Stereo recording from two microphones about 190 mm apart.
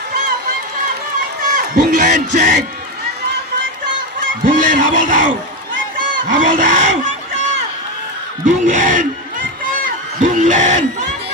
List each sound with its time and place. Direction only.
1.5 s a sound: 45° right (ahead or behind)
4.4 s a man's voice: 45° right (ahead or behind)
6.3 s goose: 45° right (ahead or behind)
8.4 s crowd: 45° right (ahead or behind)